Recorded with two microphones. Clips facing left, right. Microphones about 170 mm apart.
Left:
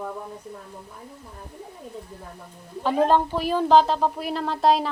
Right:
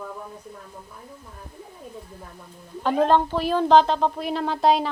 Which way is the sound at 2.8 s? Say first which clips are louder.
Right 1 dB; 5° left (ahead or behind).